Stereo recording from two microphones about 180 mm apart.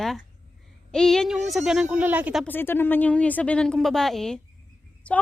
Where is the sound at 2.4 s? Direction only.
10° left (ahead or behind).